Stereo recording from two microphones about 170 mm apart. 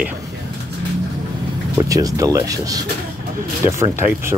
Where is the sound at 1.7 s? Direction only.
20° right (ahead or behind).